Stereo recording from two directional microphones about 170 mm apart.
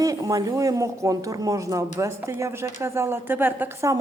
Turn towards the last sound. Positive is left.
turn(degrees=-15)  # may be behind; listen again after turning